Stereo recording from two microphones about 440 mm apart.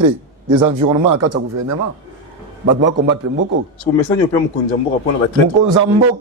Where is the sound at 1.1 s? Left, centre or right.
Right.